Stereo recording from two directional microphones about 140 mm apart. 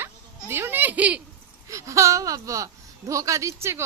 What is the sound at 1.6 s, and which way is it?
A woman's voice, 20° right (ahead or behind).